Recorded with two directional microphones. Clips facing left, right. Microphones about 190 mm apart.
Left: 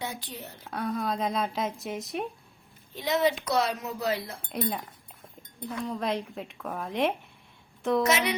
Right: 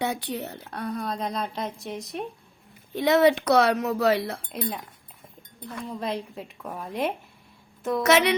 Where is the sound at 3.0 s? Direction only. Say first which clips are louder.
Right 7 dB; 65° right (ahead or behind).